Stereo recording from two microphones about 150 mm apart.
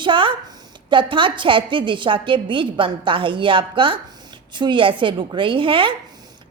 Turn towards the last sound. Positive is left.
turn(degrees=-35)  # may be behind; listen again after turning